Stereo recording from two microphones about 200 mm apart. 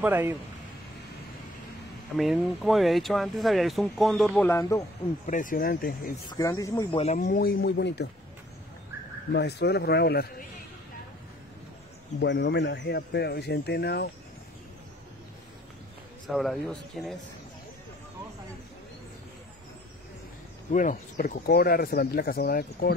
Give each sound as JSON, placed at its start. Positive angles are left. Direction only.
{"t": 0.0, "sound": "speech", "side_deg": -10}
{"t": 2.1, "sound": "speech", "side_deg": 0}
{"t": 4.5, "sound": "speech", "side_deg": 15}
{"t": 5.2, "sound": "speech", "side_deg": 40}
{"t": 6.2, "sound": "speech", "side_deg": 15}
{"t": 7.0, "sound": "speech", "side_deg": 40}
{"t": 9.3, "sound": "speech", "side_deg": 55}
{"t": 12.2, "sound": "speech", "side_deg": 60}
{"t": 16.3, "sound": "speech", "side_deg": 0}
{"t": 20.7, "sound": "speech", "side_deg": 40}